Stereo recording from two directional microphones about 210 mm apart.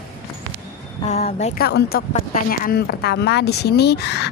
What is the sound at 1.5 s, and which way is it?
A woman's voice, 50° left (ahead or behind).